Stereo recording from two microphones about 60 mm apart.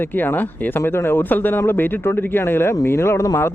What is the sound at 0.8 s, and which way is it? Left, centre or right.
Speech, left.